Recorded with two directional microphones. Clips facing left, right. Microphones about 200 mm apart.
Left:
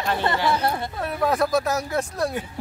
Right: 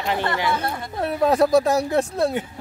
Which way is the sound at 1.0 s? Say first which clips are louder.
Right 6 dB; 25° right (ahead or behind).